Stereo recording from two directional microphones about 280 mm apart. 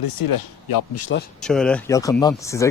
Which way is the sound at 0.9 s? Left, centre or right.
Left.